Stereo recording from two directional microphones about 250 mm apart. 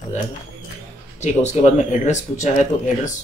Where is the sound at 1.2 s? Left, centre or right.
Left.